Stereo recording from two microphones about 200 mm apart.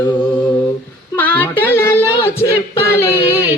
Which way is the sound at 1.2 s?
10° left (ahead or behind).